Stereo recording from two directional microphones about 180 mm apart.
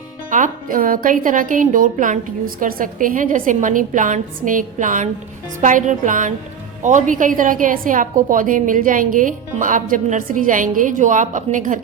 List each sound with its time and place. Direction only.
0.3 s a woman's voice: 45° right (ahead or behind)